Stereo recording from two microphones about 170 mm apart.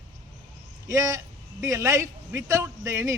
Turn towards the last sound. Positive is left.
turn(degrees=-15)  # may be behind; listen again after turning